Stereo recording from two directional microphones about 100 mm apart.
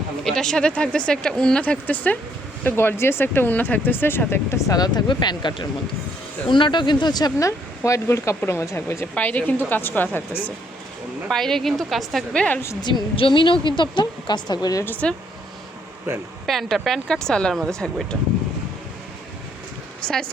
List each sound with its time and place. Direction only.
0.3 s a woman's voice: 5° left (ahead or behind)
11.3 s a woman's voice: 5° left (ahead or behind)
12.8 s a woman's voice: 55° left (ahead or behind)
16.5 s a woman's voice: centre (ahead or behind)
20.1 s speech: 5° left (ahead or behind)